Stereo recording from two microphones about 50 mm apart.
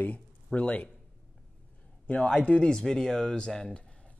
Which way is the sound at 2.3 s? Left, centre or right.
Left.